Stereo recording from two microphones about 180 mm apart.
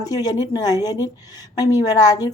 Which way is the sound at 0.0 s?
20° left (ahead or behind).